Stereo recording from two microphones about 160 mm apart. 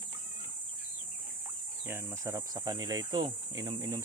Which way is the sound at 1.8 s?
15° right (ahead or behind).